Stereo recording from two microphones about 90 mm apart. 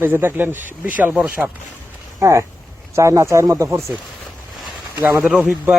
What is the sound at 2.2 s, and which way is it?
Speech, 35° right (ahead or behind).